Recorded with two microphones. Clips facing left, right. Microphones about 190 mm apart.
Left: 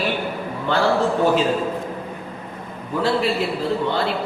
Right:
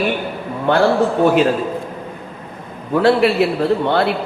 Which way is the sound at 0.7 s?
55° right (ahead or behind).